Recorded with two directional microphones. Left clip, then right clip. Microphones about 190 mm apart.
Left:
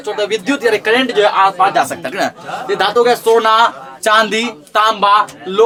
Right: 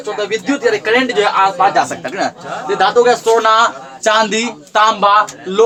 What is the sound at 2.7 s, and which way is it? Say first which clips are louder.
A man's voice: right 1 dB; 15° left (ahead or behind).